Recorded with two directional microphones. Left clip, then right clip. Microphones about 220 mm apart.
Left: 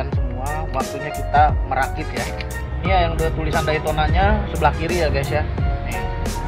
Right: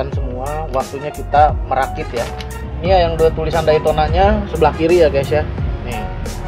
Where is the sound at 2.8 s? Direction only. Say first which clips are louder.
Right 7 dB; 55° right (ahead or behind).